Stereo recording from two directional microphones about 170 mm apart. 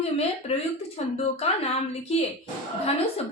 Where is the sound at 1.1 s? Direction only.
35° left (ahead or behind).